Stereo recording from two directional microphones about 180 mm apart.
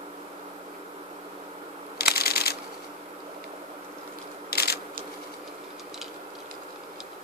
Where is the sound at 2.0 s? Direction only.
60° left (ahead or behind).